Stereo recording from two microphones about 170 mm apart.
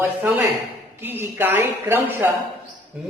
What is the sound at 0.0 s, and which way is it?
A woman's voice, 10° right (ahead or behind).